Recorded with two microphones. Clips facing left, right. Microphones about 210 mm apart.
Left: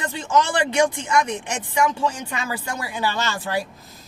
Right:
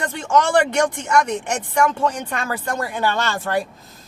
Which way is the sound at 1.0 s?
60° right (ahead or behind).